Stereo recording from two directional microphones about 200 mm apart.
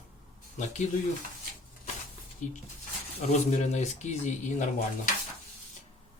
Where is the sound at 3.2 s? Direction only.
35° left (ahead or behind).